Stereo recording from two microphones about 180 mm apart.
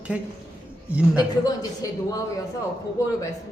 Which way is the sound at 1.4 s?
20° left (ahead or behind).